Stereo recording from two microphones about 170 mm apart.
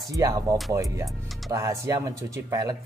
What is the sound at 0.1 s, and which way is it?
Speech, 20° right (ahead or behind).